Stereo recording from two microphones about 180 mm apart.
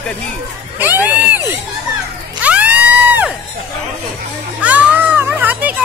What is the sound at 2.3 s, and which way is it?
Crowd, 10° right (ahead or behind).